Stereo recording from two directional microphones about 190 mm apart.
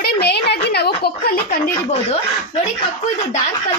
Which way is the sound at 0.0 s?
60° left (ahead or behind).